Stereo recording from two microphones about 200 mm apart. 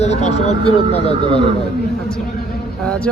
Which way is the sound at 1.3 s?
25° right (ahead or behind).